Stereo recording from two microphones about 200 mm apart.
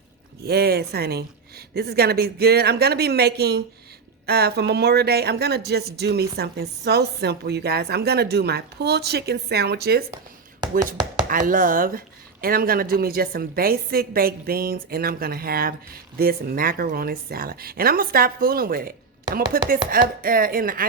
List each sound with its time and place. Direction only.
0.4 s speech: 50° right (ahead or behind)
11.3 s speech: 45° right (ahead or behind)